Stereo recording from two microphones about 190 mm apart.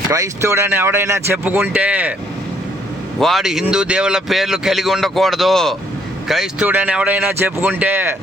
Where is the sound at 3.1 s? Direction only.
Centre (ahead or behind).